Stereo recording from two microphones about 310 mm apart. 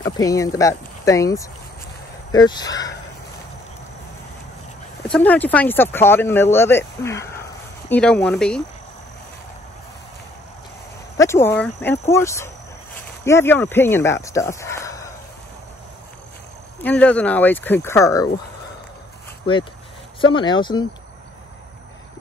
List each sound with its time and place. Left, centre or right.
0.0 s speech: centre
5.0 s speech: centre
11.1 s speech: centre
16.8 s speech: centre
20.2 s speech: centre